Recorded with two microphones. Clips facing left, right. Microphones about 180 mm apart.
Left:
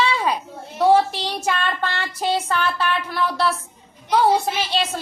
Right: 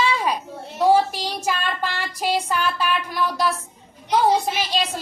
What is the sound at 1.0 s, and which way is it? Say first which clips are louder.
A woman's voice: left 1 dB; 10° right (ahead or behind).